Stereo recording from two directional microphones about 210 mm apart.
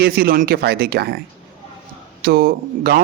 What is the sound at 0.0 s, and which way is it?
A man's voice, 45° right (ahead or behind).